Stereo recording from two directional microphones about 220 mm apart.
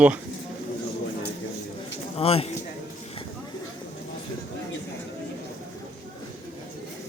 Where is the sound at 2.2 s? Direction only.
25° left (ahead or behind).